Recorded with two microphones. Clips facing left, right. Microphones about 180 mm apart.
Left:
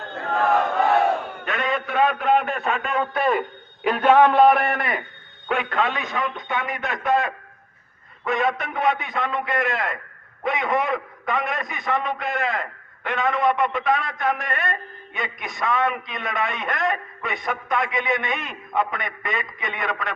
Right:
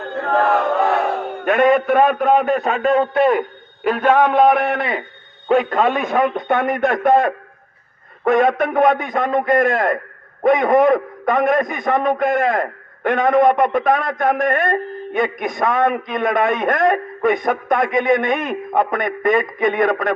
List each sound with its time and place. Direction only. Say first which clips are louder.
1.5 s a man's voice: right 13 dB; 50° right (ahead or behind); by 3.3 s 25° right (ahead or behind)
3.8 s a man's voice: right 1 dB; 10° right (ahead or behind)
5.5 s a man's voice: right 8 dB; 40° right (ahead or behind)